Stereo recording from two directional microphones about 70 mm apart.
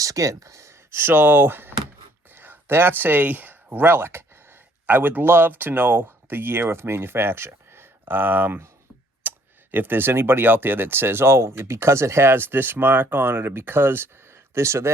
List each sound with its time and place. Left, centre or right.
0.0 s speech: right
9.2 s a sound: right
9.7 s speech: right